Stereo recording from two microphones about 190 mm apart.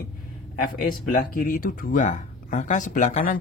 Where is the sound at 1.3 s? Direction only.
45° left (ahead or behind).